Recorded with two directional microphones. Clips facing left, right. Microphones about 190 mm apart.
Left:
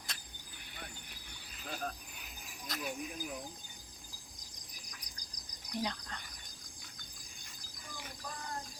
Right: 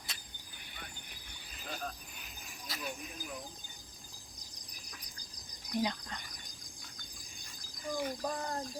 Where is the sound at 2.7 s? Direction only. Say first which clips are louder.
Left 3 dB; centre (ahead or behind).